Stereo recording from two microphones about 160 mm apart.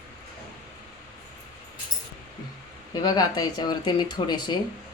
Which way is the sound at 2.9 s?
25° left (ahead or behind).